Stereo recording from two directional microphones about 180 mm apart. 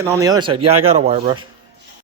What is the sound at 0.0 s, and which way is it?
Speech, 15° right (ahead or behind).